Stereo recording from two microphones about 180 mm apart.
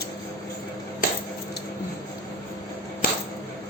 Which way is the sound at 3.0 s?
50° left (ahead or behind).